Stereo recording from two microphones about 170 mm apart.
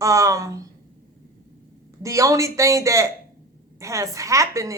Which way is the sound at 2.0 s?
20° right (ahead or behind).